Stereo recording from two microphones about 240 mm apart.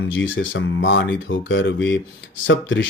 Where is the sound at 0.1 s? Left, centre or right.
Left.